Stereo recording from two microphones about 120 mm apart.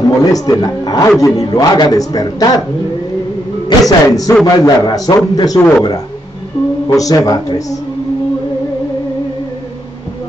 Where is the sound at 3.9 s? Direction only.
30° left (ahead or behind).